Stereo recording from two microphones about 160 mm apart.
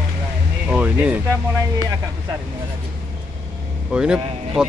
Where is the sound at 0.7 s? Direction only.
10° right (ahead or behind).